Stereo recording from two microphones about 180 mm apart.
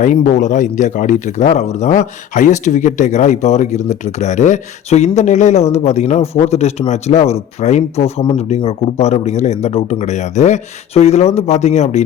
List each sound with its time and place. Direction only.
0.0 s speech: 45° left (ahead or behind)